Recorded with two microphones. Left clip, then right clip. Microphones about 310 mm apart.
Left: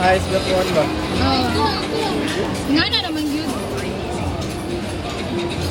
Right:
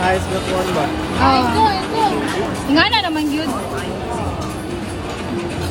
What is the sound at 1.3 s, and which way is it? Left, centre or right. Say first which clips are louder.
Speech: right 5 dB; centre.